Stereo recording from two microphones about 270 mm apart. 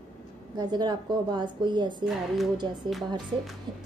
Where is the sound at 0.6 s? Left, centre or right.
Centre.